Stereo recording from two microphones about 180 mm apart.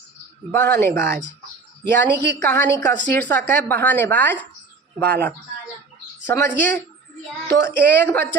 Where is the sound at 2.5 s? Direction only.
10° left (ahead or behind).